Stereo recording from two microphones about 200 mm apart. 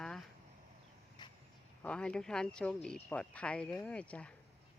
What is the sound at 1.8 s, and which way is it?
Speech, 5° left (ahead or behind).